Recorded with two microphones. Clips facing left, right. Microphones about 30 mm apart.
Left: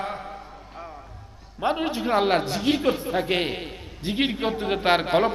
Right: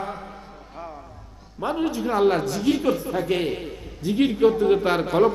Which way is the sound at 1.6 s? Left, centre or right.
Left.